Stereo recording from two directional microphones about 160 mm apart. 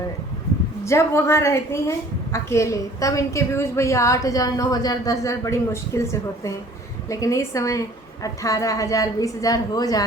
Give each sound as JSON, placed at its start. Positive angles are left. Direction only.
{"t": 0.9, "sound": "a woman's voice", "side_deg": 15}